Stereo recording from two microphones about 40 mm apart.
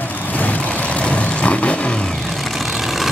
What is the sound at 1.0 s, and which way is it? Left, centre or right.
Vehicle, left.